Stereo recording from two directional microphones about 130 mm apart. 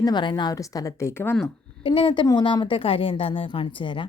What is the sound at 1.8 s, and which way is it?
A woman's voice, 40° left (ahead or behind).